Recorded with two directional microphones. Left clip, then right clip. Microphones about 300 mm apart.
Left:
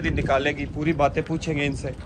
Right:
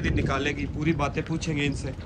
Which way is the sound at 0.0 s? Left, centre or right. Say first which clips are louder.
Left 5 dB; centre.